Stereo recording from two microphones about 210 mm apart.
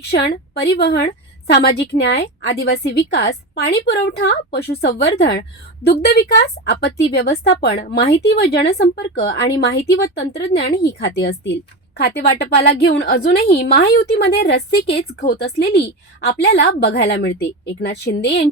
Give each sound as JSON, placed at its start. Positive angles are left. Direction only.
{"t": 0.0, "sound": "a woman's voice", "side_deg": 50}